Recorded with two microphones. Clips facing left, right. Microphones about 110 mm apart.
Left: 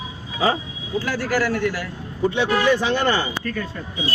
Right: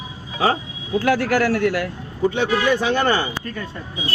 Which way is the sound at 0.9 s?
60° right (ahead or behind).